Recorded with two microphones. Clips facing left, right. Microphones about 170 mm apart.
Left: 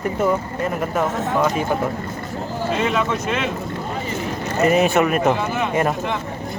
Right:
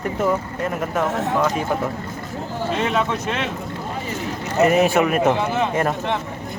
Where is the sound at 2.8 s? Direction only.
35° right (ahead or behind).